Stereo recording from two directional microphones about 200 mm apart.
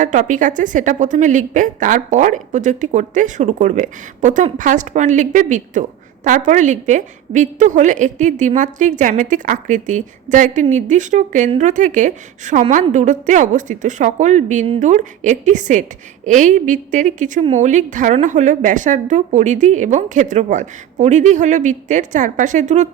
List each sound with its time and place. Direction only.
0.0 s a woman's voice: 40° right (ahead or behind)